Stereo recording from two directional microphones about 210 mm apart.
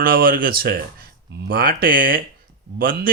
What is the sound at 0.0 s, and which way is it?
Speech, 45° right (ahead or behind).